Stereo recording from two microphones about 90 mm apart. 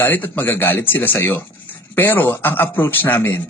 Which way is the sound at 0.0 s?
20° left (ahead or behind).